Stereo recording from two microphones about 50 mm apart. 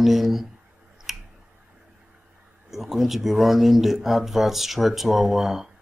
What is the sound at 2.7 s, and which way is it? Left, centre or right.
Speech, centre.